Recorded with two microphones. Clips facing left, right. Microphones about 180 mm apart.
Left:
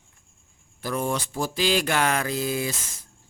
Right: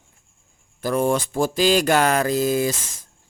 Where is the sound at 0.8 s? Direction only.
50° right (ahead or behind).